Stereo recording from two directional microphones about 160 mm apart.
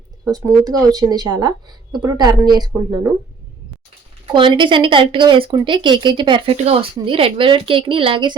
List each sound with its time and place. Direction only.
0.3 s speech: 20° right (ahead or behind)
4.3 s speech: 30° right (ahead or behind)